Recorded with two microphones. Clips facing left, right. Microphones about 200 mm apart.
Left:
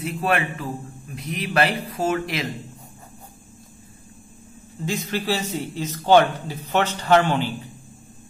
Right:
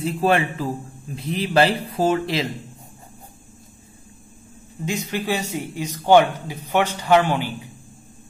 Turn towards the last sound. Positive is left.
turn(degrees=-10)  # may be behind; listen again after turning